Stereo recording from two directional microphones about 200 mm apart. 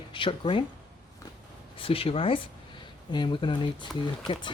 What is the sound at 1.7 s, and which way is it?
Speech, 25° left (ahead or behind).